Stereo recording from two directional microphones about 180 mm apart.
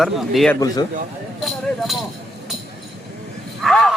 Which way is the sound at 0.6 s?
20° left (ahead or behind).